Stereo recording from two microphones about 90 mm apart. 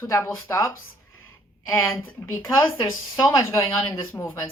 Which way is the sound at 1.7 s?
25° left (ahead or behind).